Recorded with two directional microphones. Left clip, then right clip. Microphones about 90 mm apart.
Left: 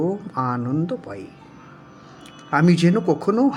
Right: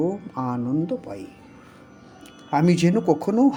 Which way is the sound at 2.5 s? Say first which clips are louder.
Left 2 dB; 45° right (ahead or behind).